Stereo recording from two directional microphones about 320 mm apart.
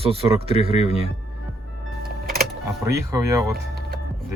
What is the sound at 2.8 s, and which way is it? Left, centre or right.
Speech, centre.